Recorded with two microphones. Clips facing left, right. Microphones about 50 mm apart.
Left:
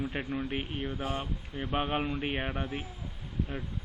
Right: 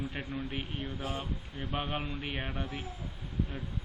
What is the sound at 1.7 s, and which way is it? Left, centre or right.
Speech, left.